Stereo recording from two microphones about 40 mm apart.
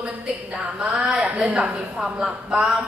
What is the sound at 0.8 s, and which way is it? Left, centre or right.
A woman's voice, right.